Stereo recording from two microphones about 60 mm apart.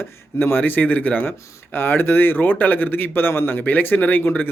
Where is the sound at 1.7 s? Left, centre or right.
Left.